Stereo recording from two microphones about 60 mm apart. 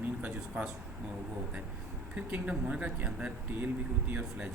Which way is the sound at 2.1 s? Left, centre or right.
Right.